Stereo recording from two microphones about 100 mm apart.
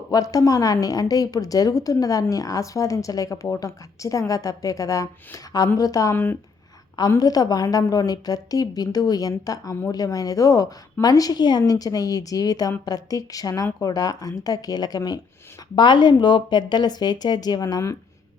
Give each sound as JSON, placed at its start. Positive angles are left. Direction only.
{"t": 0.1, "sound": "speech", "side_deg": 40}
{"t": 7.2, "sound": "a woman's voice", "side_deg": 40}